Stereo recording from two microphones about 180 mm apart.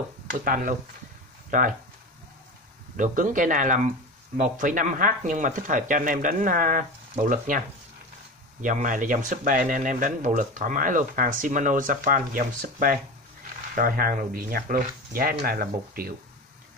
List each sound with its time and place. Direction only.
0.3 s speech: 45° right (ahead or behind)
3.0 s speech: 45° right (ahead or behind)